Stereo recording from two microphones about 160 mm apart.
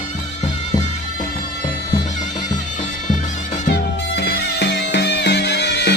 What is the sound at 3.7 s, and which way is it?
Music, 90° left.